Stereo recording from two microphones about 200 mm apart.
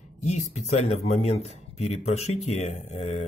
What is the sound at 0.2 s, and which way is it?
Speech, 35° left (ahead or behind).